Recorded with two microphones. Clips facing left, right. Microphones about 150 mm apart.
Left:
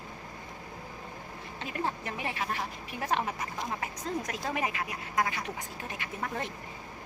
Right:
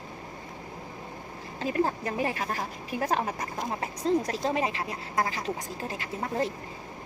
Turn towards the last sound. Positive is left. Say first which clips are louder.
# right 6 dB
turn(degrees=-30)  # may be behind; listen again after turning